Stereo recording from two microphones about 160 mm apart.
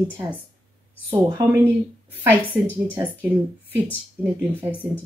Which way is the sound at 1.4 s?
20° right (ahead or behind).